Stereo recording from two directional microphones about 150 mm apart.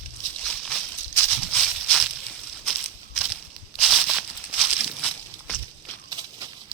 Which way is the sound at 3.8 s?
Centre (ahead or behind).